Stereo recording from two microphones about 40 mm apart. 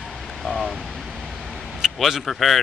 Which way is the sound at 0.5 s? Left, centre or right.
Centre.